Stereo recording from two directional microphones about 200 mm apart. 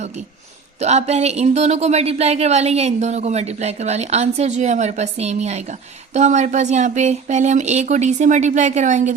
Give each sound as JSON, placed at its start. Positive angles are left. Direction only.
{"t": 0.8, "sound": "speech", "side_deg": -35}